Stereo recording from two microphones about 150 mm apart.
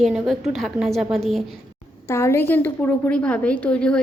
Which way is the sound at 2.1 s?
20° left (ahead or behind).